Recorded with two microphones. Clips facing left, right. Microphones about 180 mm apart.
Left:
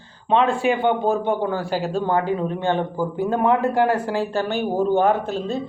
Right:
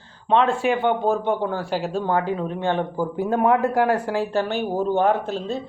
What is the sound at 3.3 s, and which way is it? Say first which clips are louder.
Speech: even; 25° left (ahead or behind).